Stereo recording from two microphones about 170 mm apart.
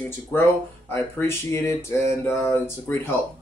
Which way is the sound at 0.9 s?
15° left (ahead or behind).